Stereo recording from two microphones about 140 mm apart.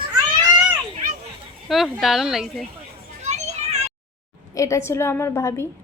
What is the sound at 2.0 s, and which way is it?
Speech, centre (ahead or behind).